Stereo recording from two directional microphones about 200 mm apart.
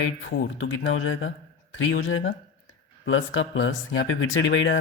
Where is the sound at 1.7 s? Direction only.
90° left.